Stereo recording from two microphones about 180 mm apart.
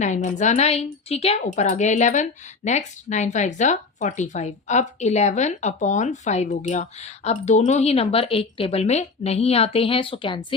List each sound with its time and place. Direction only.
0.0 s speech: 40° left (ahead or behind)